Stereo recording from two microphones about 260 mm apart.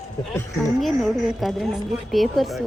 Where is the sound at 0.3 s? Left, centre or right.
Centre.